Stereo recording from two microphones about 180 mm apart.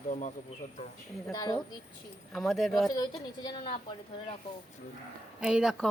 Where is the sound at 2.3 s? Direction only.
Centre (ahead or behind).